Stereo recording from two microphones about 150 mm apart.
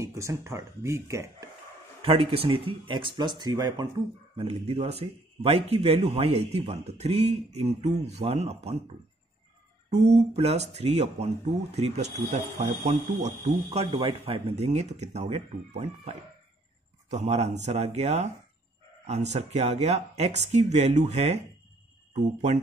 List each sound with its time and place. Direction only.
0.0 s speech: 20° right (ahead or behind)
2.0 s speech: 40° right (ahead or behind)
4.4 s speech: 40° right (ahead or behind)
10.1 s speech: 45° right (ahead or behind)
13.9 s speech: 35° right (ahead or behind)